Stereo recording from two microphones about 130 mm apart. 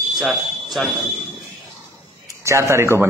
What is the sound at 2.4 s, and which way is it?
Speech, 20° right (ahead or behind).